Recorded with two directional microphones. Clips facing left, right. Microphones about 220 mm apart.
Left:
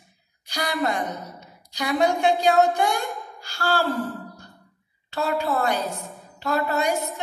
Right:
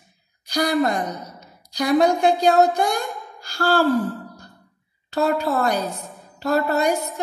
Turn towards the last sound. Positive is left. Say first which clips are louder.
# right 4 dB
turn(degrees=-40)  # may be behind; listen again after turning